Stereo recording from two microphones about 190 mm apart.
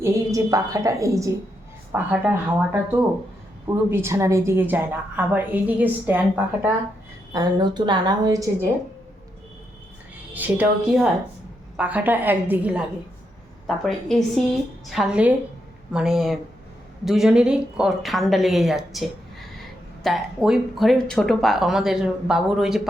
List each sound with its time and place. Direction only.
0.0 s a woman's voice: 15° right (ahead or behind)
7.3 s a woman's voice: 20° right (ahead or behind)
10.3 s a woman's voice: 10° right (ahead or behind)